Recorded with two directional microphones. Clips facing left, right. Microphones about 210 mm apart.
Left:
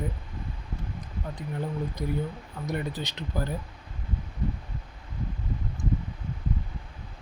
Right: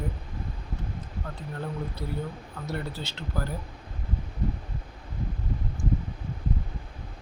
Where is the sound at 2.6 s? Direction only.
15° left (ahead or behind).